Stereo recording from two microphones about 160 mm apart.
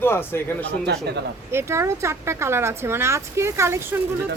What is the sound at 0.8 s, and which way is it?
Speech, 90° right.